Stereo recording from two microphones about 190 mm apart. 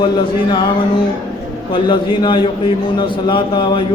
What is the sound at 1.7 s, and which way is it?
A man's voice, 25° left (ahead or behind).